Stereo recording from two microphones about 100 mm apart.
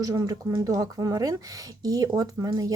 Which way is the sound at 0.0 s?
35° right (ahead or behind).